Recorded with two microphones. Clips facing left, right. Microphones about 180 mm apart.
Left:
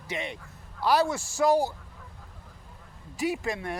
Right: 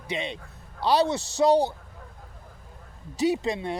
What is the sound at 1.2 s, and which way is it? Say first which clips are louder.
Speech: right 3 dB; 70° right (ahead or behind).